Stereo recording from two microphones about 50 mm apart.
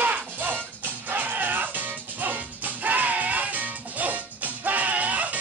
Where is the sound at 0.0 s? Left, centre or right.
Right.